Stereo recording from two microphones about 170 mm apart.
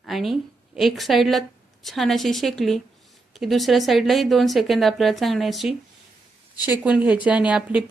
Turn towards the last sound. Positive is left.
turn(degrees=-5)  # may be behind; listen again after turning